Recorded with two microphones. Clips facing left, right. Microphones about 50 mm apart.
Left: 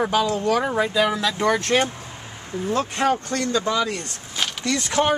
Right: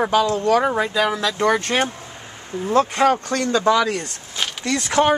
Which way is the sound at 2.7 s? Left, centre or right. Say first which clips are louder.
Right 5 dB; right.